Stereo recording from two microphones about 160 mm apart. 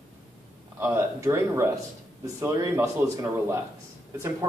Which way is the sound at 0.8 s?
15° right (ahead or behind).